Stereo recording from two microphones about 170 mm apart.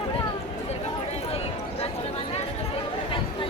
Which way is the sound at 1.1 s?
35° left (ahead or behind).